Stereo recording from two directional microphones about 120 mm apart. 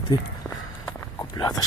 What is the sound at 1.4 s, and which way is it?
Speech, 30° left (ahead or behind).